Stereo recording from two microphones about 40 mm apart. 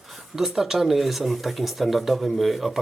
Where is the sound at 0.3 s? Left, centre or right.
Centre.